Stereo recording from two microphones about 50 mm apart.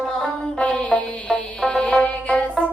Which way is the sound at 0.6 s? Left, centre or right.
Left.